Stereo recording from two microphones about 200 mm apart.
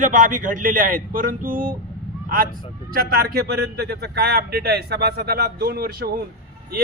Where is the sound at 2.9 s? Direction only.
50° right (ahead or behind).